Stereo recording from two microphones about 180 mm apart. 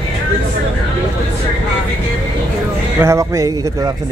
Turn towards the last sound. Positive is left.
turn(degrees=-20)  # may be behind; listen again after turning